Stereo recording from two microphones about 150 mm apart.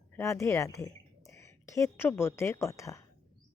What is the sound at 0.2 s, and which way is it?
A woman's voice, 20° left (ahead or behind).